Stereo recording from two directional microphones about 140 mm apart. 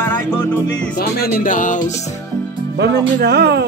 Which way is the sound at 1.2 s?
80° left.